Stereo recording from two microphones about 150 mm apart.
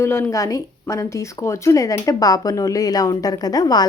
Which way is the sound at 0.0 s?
15° left (ahead or behind).